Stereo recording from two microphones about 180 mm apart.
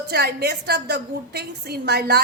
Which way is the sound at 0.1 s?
60° right (ahead or behind).